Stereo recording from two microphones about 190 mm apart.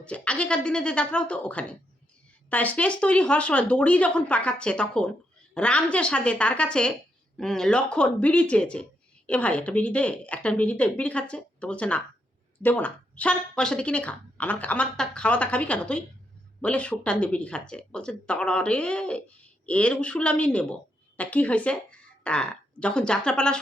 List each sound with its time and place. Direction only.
0.0 s speech: 5° left (ahead or behind)